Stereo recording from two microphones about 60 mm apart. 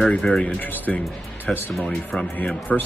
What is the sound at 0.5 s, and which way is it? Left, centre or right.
Speech, left.